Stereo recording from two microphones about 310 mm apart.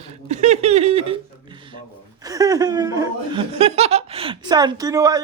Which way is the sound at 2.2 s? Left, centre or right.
Centre.